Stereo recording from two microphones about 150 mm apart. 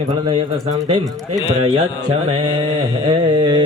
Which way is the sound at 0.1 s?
40° right (ahead or behind).